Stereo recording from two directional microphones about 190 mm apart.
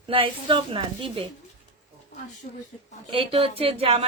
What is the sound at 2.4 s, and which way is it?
Speech, 40° left (ahead or behind).